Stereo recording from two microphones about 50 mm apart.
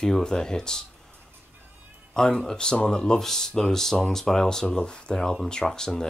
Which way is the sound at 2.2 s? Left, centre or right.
Centre.